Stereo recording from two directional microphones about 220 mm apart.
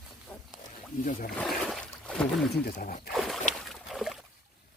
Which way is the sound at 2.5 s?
40° left (ahead or behind).